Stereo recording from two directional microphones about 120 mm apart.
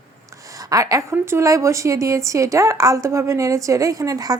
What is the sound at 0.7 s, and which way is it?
A woman's voice, 25° right (ahead or behind).